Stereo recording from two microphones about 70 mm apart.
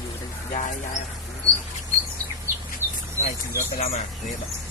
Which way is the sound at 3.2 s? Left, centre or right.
Right.